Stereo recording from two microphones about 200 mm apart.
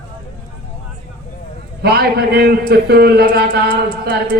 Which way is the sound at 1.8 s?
50° right (ahead or behind).